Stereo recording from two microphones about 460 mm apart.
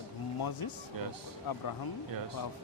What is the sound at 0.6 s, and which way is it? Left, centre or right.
Speech, left.